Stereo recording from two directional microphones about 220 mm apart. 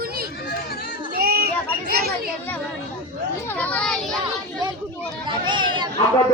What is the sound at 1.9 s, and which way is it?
Chatter, 45° right (ahead or behind).